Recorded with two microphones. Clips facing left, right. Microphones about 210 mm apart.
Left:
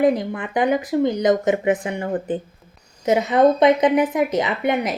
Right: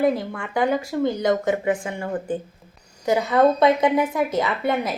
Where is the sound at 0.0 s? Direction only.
20° left (ahead or behind).